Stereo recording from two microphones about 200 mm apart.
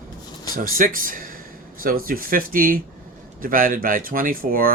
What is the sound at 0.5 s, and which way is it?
Speech, 45° right (ahead or behind).